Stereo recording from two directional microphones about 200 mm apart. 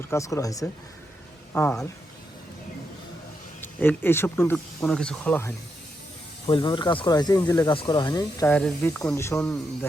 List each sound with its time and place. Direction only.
0.0 s speech: 15° left (ahead or behind)
3.6 s speech: 10° left (ahead or behind)
6.5 s speech: 25° left (ahead or behind); by 9.6 s 5° left (ahead or behind)